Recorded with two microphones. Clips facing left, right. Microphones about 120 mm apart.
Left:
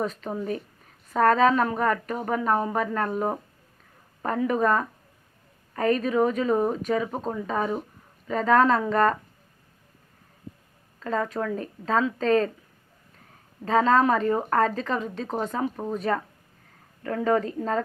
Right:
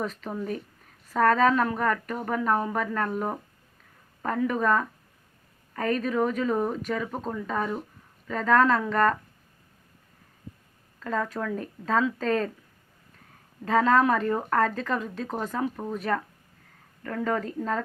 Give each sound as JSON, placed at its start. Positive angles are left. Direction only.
{"t": 0.0, "sound": "a woman's voice", "side_deg": 0}
{"t": 11.0, "sound": "speech", "side_deg": 0}
{"t": 13.7, "sound": "speech", "side_deg": 0}
{"t": 14.3, "sound": "a woman's voice", "side_deg": 10}
{"t": 14.6, "sound": "speech", "side_deg": 0}
{"t": 15.3, "sound": "speech", "side_deg": 25}
{"t": 15.5, "sound": "a woman's voice", "side_deg": 10}